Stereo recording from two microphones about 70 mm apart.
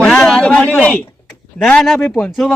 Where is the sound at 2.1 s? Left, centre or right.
Centre.